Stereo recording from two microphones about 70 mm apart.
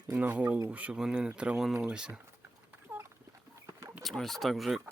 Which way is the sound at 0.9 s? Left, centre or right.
Centre.